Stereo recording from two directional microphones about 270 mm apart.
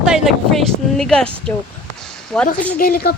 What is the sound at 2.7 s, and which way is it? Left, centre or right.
Speech, left.